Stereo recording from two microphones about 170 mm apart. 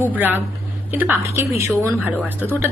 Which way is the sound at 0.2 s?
10° right (ahead or behind).